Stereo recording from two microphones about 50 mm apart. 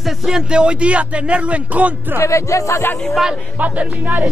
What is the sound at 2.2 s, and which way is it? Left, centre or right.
Music, left.